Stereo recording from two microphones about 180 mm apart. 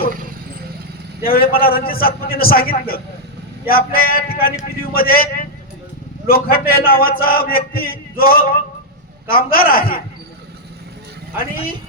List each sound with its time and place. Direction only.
1.2 s a man's voice: 55° left (ahead or behind)
11.3 s a man's voice: 55° left (ahead or behind)